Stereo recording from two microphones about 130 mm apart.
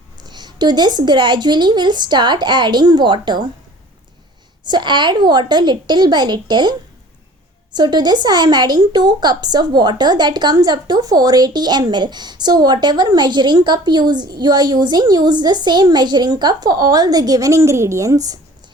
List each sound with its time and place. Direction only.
0.2 s speech: 35° right (ahead or behind)
4.6 s speech: 35° right (ahead or behind)